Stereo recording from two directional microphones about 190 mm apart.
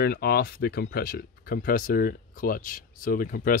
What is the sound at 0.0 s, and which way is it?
Speech, 55° left (ahead or behind).